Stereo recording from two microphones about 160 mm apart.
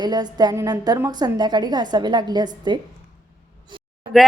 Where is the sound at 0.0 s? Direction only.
25° right (ahead or behind).